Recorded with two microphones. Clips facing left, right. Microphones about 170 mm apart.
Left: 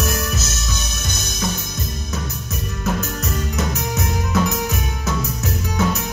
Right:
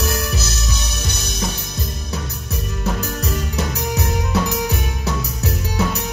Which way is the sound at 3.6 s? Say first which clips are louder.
Even; 35° right (ahead or behind).